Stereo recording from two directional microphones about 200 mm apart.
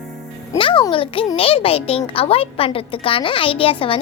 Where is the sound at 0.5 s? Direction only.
25° left (ahead or behind).